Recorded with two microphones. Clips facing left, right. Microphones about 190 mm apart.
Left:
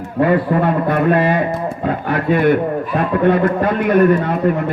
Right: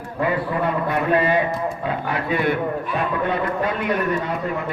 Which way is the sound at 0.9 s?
50° left (ahead or behind).